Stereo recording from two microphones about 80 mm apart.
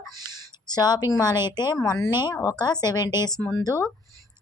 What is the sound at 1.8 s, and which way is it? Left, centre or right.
Speech, left.